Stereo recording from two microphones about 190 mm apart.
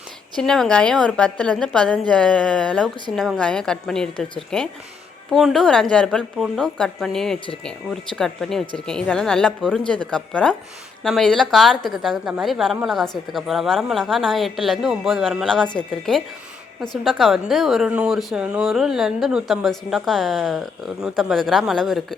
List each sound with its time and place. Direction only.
0.3 s a woman's voice: 5° left (ahead or behind)